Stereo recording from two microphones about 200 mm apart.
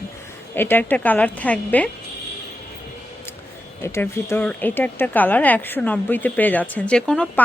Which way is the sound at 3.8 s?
15° left (ahead or behind).